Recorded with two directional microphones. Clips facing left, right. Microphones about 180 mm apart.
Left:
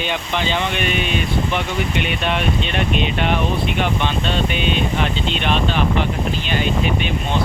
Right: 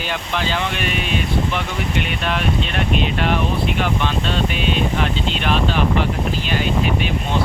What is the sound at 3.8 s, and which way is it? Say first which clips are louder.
Speech: even; centre (ahead or behind).